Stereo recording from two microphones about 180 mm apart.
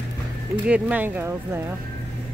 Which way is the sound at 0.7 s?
10° right (ahead or behind).